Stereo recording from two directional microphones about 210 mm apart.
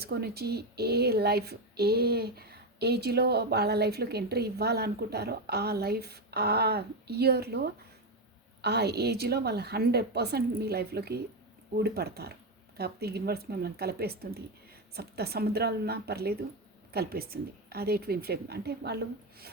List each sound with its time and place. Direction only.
0.0 s speech: 50° right (ahead or behind)